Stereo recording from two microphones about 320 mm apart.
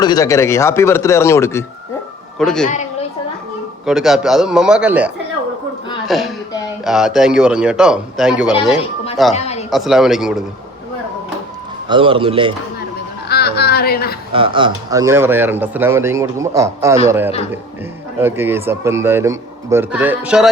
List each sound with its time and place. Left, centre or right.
0.0 s a man's voice: centre
3.8 s a man's voice: centre
9.3 s a sound: centre
9.6 s a man's voice: centre
11.9 s speech: centre
13.2 s a sound: left
14.3 s speech: centre